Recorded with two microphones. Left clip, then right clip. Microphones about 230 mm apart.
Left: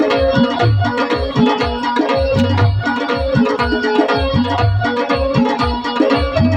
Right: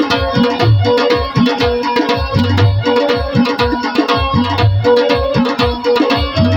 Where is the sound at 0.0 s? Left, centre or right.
Right.